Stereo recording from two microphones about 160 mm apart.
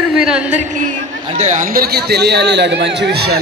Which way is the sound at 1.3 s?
50° right (ahead or behind).